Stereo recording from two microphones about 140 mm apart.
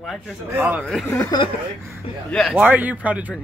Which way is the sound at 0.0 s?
Centre (ahead or behind).